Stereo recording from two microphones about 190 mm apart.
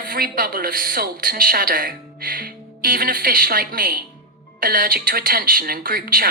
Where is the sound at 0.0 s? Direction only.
50° right (ahead or behind).